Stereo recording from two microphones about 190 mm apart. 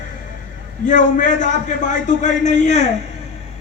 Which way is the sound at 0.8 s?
40° left (ahead or behind).